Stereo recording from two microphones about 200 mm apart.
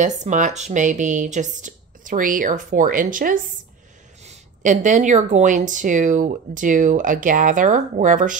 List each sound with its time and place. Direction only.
0.2 s speech: 35° right (ahead or behind)